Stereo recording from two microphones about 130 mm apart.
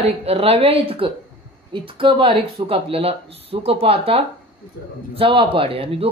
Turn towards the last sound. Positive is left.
turn(degrees=-45)  # may be behind; listen again after turning